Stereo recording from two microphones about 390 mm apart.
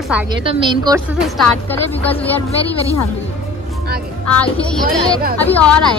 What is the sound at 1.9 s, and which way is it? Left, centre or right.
Speech, centre.